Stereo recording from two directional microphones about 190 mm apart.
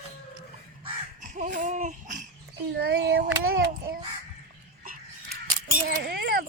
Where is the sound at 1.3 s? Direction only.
40° right (ahead or behind).